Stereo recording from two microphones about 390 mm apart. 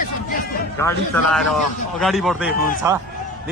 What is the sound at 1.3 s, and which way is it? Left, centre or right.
A man's voice, centre.